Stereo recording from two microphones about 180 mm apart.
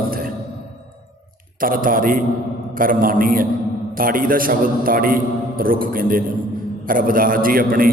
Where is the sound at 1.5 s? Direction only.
50° right (ahead or behind).